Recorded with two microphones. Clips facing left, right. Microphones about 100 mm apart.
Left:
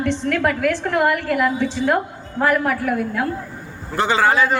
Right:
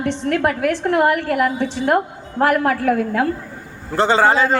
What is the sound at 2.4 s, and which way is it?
Speech, 55° right (ahead or behind).